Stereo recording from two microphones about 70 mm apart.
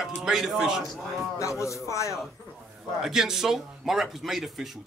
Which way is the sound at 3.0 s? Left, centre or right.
Centre.